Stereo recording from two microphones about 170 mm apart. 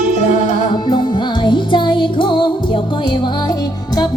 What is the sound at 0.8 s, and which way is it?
Music, 25° left (ahead or behind).